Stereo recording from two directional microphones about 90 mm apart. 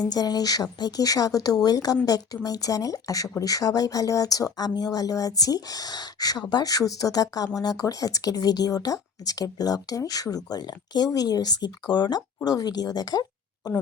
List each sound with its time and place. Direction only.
0.0 s speech: 45° left (ahead or behind)